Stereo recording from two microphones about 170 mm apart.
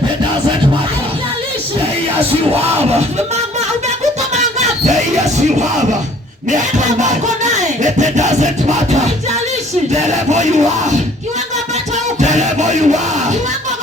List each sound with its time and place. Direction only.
2.5 s music: 35° right (ahead or behind)
6.5 s speech: 45° right (ahead or behind)
9.9 s speech: 45° right (ahead or behind)
12.2 s a sound: 45° right (ahead or behind)